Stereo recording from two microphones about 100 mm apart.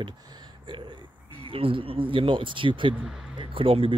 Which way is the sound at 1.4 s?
65° right (ahead or behind).